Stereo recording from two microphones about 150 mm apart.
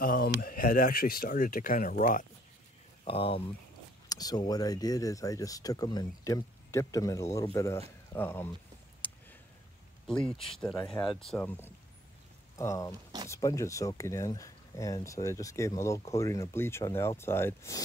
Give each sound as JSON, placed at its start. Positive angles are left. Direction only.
{"t": 0.0, "sound": "a sound", "side_deg": 70}
{"t": 0.4, "sound": "speech", "side_deg": 70}
{"t": 3.1, "sound": "speech", "side_deg": 40}
{"t": 4.1, "sound": "speech", "side_deg": 25}
{"t": 9.0, "sound": "a sound", "side_deg": 10}
{"t": 10.3, "sound": "speech", "side_deg": 40}
{"t": 10.6, "sound": "speech", "side_deg": 5}